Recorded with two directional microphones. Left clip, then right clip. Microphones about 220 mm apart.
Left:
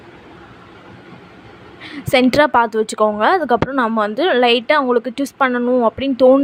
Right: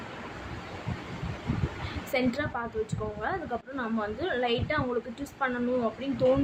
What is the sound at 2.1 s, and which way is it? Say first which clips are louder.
A woman's voice: left 18 dB; 50° left (ahead or behind).